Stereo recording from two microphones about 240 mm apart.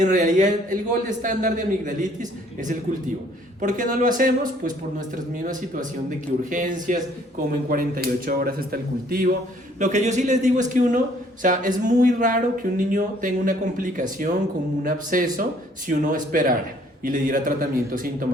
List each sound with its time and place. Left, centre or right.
0.0 s speech: right
3.6 s a man's voice: right